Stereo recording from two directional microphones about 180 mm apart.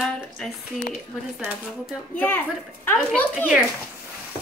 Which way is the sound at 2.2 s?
10° left (ahead or behind).